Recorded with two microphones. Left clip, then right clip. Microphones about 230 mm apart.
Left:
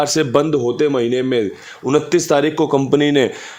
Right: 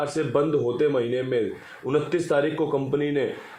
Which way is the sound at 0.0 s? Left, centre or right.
Left.